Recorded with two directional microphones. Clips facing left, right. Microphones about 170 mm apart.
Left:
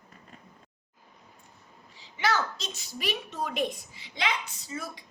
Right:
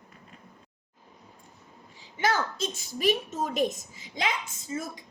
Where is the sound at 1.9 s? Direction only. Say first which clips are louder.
Right 1 dB; 50° right (ahead or behind).